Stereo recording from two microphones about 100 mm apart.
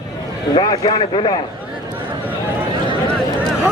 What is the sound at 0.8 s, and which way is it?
Speech, 65° left (ahead or behind).